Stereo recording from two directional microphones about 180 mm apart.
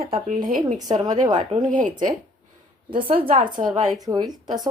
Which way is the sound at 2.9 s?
30° right (ahead or behind).